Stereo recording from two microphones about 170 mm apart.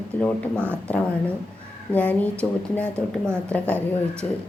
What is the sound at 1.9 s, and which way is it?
Speech, 10° left (ahead or behind).